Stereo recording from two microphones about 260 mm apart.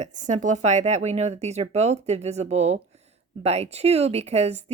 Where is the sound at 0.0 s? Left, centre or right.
Right.